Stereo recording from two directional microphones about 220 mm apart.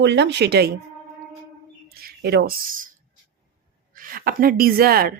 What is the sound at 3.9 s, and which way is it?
A woman's voice, 40° right (ahead or behind).